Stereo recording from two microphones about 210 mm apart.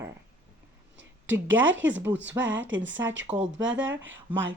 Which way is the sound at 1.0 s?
65° right (ahead or behind).